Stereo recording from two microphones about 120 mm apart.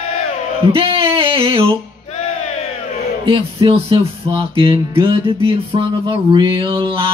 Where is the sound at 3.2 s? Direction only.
45° right (ahead or behind).